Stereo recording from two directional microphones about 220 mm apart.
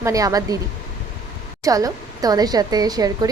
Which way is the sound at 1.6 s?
15° right (ahead or behind).